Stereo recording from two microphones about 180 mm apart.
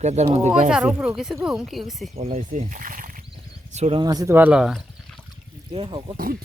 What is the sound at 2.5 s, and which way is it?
Speech, 45° right (ahead or behind).